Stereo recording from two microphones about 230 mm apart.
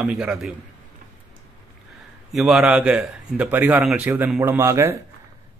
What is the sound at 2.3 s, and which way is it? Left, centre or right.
A man's voice, centre.